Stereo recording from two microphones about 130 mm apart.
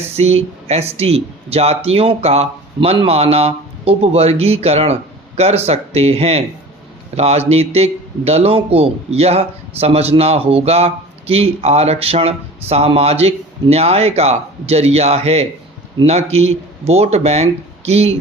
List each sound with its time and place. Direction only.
0.0 s a man's voice: 55° right (ahead or behind)